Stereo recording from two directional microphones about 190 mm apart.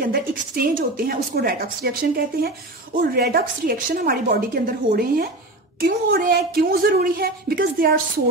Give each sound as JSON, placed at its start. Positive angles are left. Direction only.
{"t": 0.1, "sound": "speech", "side_deg": -50}